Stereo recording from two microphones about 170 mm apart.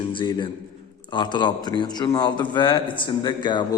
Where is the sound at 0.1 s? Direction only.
30° left (ahead or behind).